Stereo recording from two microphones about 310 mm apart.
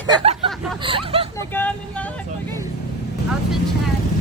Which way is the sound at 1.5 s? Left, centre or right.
Centre.